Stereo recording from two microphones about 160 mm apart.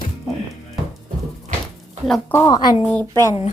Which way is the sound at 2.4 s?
25° left (ahead or behind).